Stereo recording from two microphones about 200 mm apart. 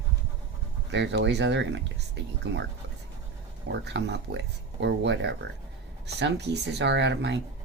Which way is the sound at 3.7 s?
60° right (ahead or behind).